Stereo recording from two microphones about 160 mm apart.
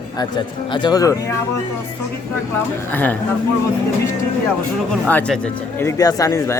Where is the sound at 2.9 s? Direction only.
10° left (ahead or behind).